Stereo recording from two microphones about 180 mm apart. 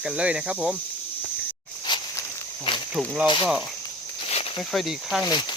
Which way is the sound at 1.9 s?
25° left (ahead or behind).